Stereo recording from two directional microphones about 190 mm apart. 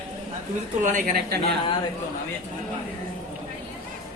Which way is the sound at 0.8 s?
45° right (ahead or behind).